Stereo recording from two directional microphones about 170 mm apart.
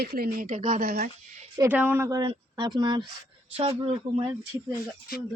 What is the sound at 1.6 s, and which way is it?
Speech, 10° right (ahead or behind).